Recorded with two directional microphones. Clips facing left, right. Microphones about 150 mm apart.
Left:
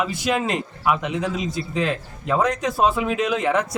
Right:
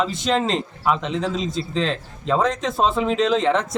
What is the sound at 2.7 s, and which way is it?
Speech, 25° right (ahead or behind).